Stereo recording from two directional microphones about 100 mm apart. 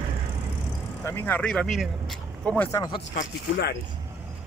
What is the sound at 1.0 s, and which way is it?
Speech, 25° left (ahead or behind).